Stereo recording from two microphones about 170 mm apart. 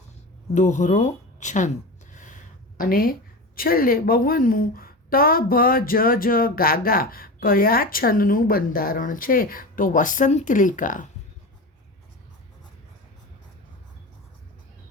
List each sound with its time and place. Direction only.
0.5 s a woman's voice: 45° left (ahead or behind)